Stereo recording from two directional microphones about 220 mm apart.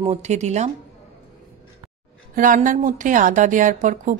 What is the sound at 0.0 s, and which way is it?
Speech, 30° right (ahead or behind).